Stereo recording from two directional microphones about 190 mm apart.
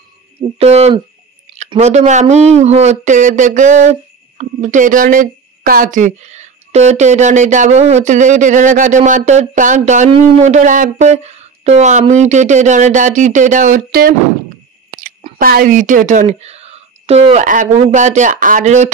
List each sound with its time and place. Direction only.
0.6 s speech: 35° right (ahead or behind)
14.9 s a sound: 45° right (ahead or behind)
15.3 s speech: 50° right (ahead or behind)